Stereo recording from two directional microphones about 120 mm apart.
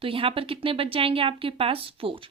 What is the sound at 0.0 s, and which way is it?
Speech, 50° right (ahead or behind).